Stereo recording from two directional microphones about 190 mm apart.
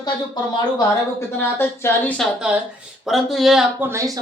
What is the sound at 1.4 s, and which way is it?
Speech, 10° left (ahead or behind).